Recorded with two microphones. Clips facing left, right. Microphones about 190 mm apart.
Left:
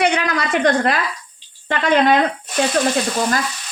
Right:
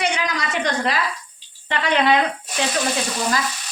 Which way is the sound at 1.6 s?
45° left (ahead or behind).